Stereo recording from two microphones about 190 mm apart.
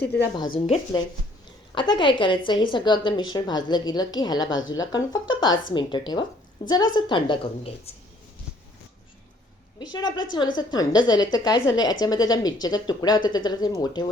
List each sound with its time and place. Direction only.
0.3 s a woman's voice: 25° left (ahead or behind)
9.7 s a woman's voice: 20° left (ahead or behind)